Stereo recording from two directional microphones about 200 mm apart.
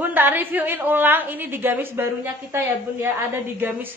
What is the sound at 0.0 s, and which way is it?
A woman's voice, 10° right (ahead or behind).